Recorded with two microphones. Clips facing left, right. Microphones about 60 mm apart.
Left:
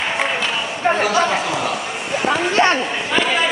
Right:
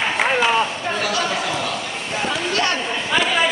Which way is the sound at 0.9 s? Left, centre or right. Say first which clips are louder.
Left 3 dB; left.